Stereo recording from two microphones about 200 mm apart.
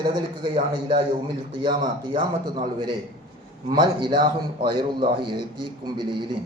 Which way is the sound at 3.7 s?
20° right (ahead or behind).